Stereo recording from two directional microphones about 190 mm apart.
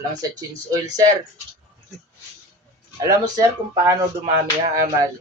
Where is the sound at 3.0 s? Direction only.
20° right (ahead or behind).